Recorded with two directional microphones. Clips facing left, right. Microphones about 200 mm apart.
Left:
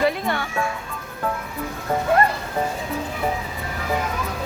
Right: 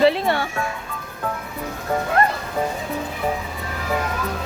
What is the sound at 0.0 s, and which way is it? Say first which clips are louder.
Music: right 4 dB; 30° right (ahead or behind).